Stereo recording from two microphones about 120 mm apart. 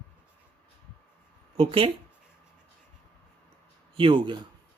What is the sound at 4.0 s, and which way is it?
Speech, 45° right (ahead or behind).